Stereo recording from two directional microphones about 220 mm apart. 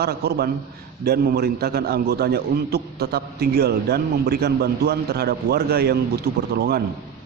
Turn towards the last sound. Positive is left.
turn(degrees=-45)  # may be behind; listen again after turning